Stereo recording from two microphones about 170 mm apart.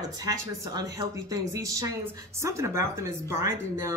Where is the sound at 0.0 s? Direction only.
20° right (ahead or behind).